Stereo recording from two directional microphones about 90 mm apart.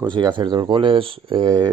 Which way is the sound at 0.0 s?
55° right (ahead or behind).